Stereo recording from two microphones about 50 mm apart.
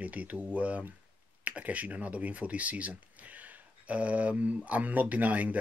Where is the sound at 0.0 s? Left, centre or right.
Right.